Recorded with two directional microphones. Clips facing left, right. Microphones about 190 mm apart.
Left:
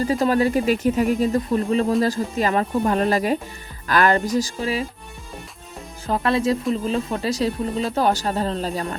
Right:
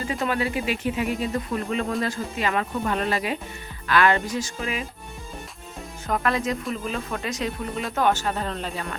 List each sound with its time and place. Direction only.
0.0 s speech: 35° left (ahead or behind)
6.1 s speech: 30° left (ahead or behind)